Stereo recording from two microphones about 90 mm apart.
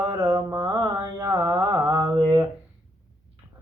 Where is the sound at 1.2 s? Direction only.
40° right (ahead or behind).